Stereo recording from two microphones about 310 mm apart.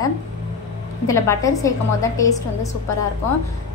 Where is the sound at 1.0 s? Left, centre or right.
Centre.